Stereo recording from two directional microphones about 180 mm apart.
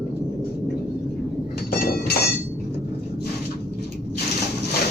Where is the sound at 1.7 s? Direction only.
60° left (ahead or behind).